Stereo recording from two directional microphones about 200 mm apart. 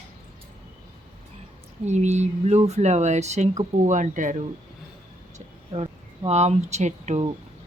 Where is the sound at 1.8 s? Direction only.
35° right (ahead or behind).